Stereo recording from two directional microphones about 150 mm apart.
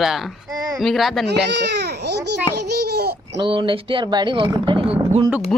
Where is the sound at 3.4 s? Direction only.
35° right (ahead or behind).